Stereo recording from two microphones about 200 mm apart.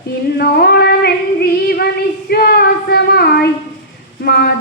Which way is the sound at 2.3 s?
50° left (ahead or behind).